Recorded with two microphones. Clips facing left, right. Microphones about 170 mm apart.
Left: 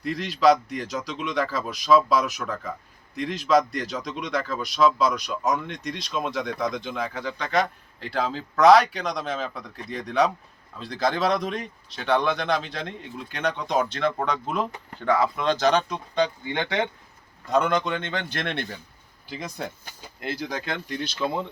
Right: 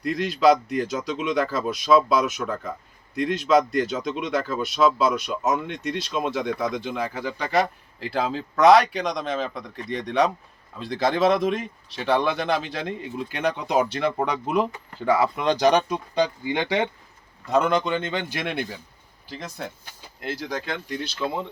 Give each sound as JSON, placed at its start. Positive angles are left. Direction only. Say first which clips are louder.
{"t": 0.0, "sound": "speech", "louder": "right 1 dB", "side_deg": 0}